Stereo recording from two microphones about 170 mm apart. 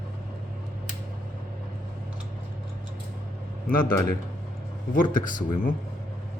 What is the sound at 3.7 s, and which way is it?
Speech, 55° left (ahead or behind).